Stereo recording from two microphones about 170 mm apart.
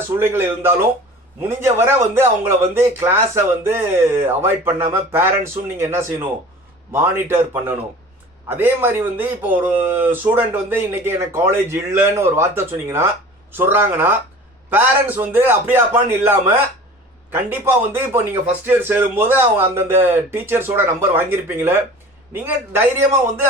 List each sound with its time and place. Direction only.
0.2 s speech: 15° right (ahead or behind)